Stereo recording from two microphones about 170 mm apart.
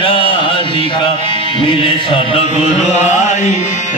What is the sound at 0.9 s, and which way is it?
Music, 30° left (ahead or behind).